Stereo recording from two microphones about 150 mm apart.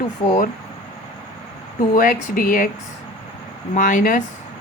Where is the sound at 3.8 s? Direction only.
60° left (ahead or behind).